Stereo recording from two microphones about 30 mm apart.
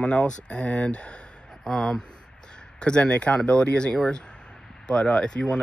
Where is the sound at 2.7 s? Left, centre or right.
Left.